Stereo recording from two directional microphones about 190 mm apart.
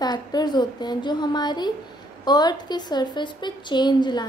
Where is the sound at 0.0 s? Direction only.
20° left (ahead or behind).